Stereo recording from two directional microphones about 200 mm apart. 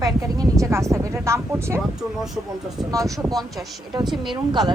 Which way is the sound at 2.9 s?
15° right (ahead or behind).